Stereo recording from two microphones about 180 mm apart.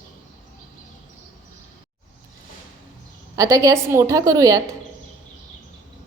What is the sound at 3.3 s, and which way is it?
A woman's voice, 20° right (ahead or behind).